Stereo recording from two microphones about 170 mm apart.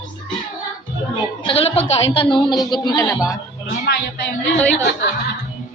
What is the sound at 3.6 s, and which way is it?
Music, 70° left (ahead or behind).